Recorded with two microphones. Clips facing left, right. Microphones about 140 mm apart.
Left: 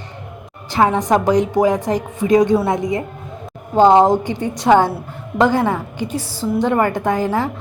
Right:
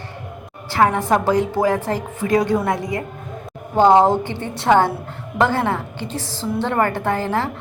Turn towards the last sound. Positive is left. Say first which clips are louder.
# left 3 dB
turn(degrees=15)  # may be behind; listen again after turning